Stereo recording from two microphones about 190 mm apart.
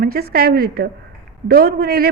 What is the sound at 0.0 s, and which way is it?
A woman's voice, 50° right (ahead or behind).